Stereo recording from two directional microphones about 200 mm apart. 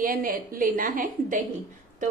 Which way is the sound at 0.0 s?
45° right (ahead or behind).